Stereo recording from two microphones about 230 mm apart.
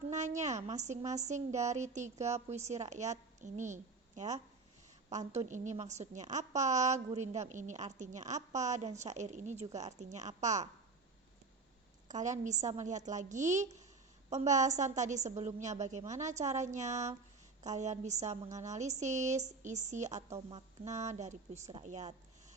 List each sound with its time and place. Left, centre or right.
0.1 s a woman's voice: right
12.0 s a woman's voice: right